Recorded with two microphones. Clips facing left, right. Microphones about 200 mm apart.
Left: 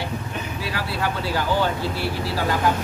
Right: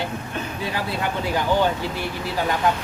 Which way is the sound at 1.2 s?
15° right (ahead or behind).